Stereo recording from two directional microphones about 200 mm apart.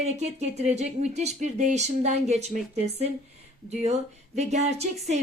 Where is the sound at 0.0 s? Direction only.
35° right (ahead or behind).